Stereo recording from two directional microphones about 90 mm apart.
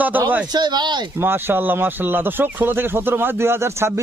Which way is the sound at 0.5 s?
55° right (ahead or behind).